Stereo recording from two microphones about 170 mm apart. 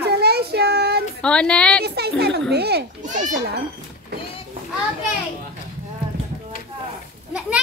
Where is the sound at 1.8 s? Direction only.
70° right (ahead or behind).